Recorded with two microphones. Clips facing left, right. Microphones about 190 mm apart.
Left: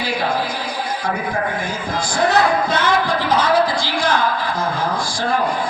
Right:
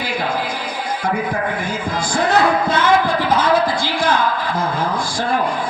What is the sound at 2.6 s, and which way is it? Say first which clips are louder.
Music: right 2 dB; 55° right (ahead or behind).